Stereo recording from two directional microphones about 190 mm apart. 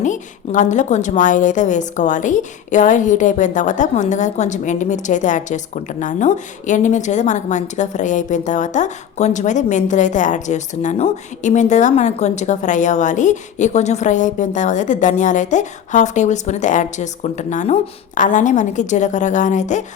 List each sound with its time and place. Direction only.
0.0 s a woman's voice: 40° left (ahead or behind)